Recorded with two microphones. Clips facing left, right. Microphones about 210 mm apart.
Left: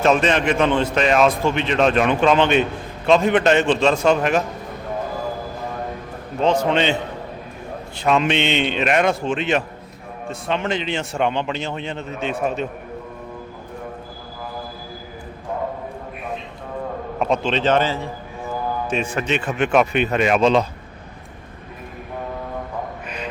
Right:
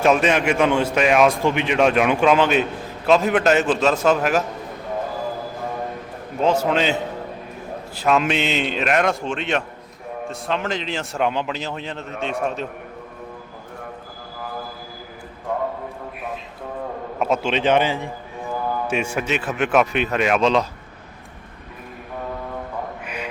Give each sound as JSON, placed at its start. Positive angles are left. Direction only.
{"t": 0.0, "sound": "a man's voice", "side_deg": -10}
{"t": 6.4, "sound": "a man's voice", "side_deg": -5}
{"t": 7.9, "sound": "a man's voice", "side_deg": 0}
{"t": 17.2, "sound": "a man's voice", "side_deg": -5}
{"t": 23.0, "sound": "music", "side_deg": -10}